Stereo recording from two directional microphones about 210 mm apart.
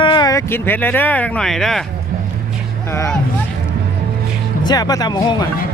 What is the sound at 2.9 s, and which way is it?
Speech, 10° left (ahead or behind).